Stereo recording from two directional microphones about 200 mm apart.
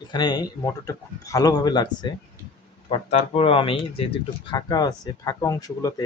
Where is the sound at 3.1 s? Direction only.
30° left (ahead or behind).